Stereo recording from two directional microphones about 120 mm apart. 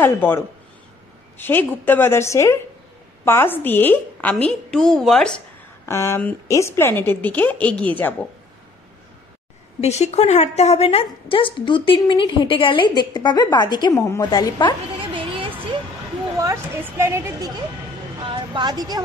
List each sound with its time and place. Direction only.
0.0 s a woman's voice: 15° left (ahead or behind)
1.4 s a woman's voice: 15° left (ahead or behind)
5.9 s a woman's voice: 20° left (ahead or behind)
9.8 s a woman's voice: 65° left (ahead or behind); by 14.8 s 35° left (ahead or behind)
15.0 s a sound: 45° right (ahead or behind)
16.3 s a woman's voice: 25° right (ahead or behind)
18.2 s speech: 40° right (ahead or behind)